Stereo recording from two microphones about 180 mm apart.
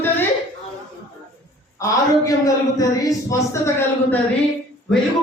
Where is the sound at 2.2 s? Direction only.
20° left (ahead or behind).